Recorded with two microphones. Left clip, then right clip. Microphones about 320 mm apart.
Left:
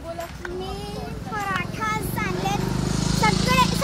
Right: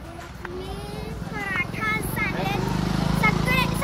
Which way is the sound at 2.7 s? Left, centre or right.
Right.